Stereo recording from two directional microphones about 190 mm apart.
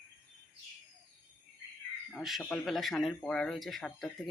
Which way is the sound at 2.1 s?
Centre (ahead or behind).